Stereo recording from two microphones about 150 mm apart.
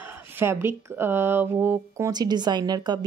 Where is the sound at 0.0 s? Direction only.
15° right (ahead or behind).